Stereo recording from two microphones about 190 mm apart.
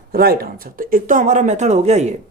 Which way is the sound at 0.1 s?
50° right (ahead or behind).